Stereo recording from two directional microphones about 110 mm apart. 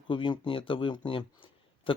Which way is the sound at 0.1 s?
50° left (ahead or behind).